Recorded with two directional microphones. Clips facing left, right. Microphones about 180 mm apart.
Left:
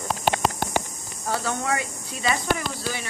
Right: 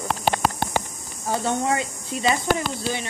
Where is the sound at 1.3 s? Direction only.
25° right (ahead or behind).